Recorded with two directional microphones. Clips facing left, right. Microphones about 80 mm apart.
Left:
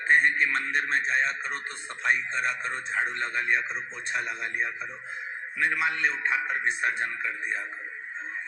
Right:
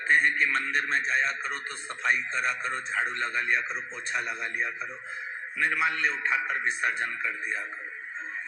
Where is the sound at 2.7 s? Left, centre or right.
Left.